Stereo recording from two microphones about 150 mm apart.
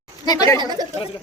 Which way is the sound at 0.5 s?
25° right (ahead or behind).